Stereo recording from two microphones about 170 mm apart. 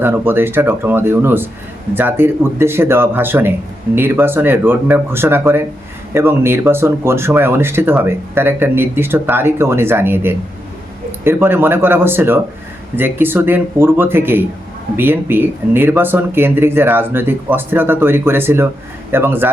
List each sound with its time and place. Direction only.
0.0 s speech: 10° right (ahead or behind)